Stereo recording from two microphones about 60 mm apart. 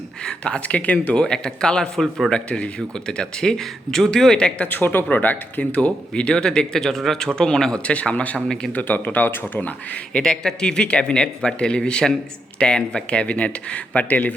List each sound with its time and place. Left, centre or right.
0.3 s speech: centre
4.8 s speech: left